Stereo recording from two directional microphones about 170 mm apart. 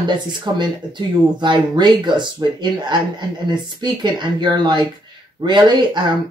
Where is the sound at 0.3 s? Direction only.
25° right (ahead or behind).